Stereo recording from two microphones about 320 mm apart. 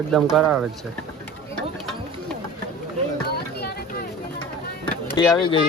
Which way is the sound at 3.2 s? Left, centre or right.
Left.